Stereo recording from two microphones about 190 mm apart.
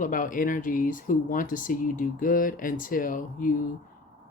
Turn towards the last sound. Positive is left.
turn(degrees=45)  # may be behind; listen again after turning